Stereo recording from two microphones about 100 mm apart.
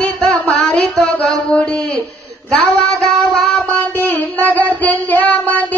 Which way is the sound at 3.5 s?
20° left (ahead or behind).